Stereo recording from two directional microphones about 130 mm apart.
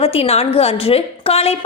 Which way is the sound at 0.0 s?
50° left (ahead or behind).